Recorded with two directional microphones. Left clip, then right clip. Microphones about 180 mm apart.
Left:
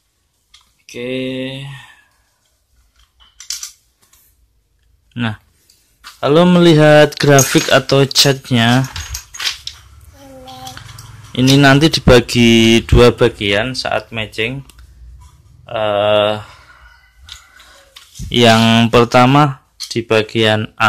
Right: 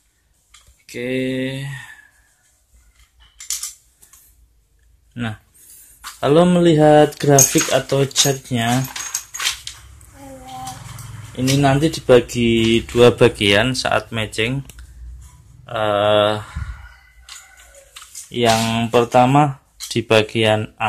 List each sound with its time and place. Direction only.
0.8 s speech: 10° left (ahead or behind)
5.1 s speech: 25° left (ahead or behind)
6.1 s speech: 15° left (ahead or behind)
11.3 s speech: 35° left (ahead or behind)
13.2 s speech: centre (ahead or behind)
15.6 s speech: 5° left (ahead or behind)
18.3 s speech: 30° left (ahead or behind)
19.9 s speech: 5° left (ahead or behind)